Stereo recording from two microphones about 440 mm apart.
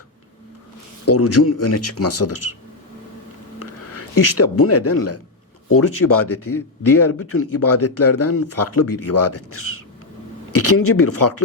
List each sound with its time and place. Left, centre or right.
1.0 s speech: left
3.6 s a sound: left
4.5 s speech: left